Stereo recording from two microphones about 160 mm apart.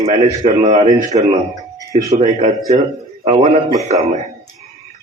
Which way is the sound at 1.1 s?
25° right (ahead or behind).